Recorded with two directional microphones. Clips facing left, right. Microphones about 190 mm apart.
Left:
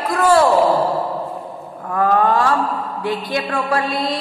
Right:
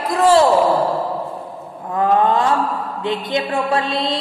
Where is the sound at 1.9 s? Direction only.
20° right (ahead or behind).